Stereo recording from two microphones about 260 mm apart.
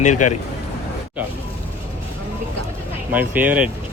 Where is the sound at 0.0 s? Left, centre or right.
Left.